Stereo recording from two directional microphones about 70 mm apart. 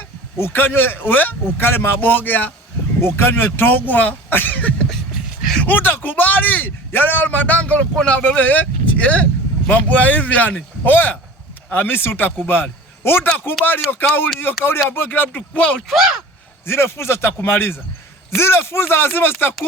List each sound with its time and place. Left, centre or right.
0.3 s a man's voice: left
15.9 s speech: centre
16.6 s speech: left